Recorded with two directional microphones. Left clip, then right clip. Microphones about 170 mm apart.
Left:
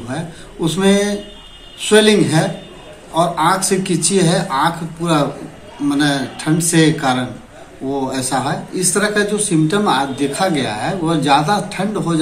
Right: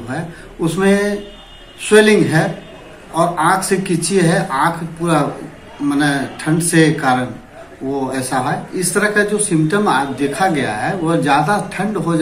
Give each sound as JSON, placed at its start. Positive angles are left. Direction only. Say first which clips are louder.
{"t": 0.1, "sound": "speech", "louder": "right 1 dB", "side_deg": 5}